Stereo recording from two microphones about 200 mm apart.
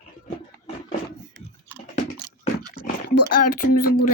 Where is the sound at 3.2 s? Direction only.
45° left (ahead or behind).